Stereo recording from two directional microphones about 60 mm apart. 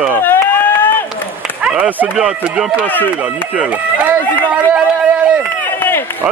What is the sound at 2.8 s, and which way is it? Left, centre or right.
Speech, left.